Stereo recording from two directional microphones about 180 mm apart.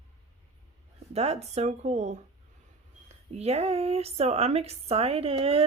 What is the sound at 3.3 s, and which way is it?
Speech, 35° right (ahead or behind).